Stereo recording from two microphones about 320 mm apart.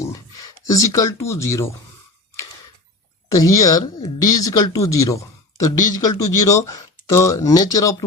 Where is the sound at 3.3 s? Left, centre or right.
Centre.